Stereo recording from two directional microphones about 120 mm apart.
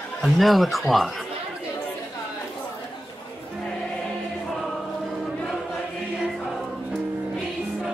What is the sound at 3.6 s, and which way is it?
Choir, 5° left (ahead or behind).